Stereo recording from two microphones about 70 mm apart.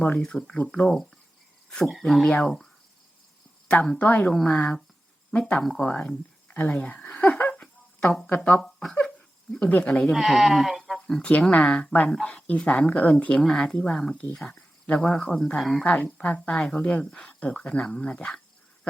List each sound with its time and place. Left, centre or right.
0.2 s speech: centre
3.9 s speech: left
4.3 s speech: centre
9.0 s a sound: centre
9.6 s speech: centre
10.2 s speech: centre
11.0 s speech: centre
15.8 s speech: centre